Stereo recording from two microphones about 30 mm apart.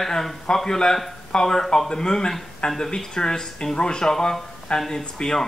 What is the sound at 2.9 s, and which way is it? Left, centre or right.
Speech, left.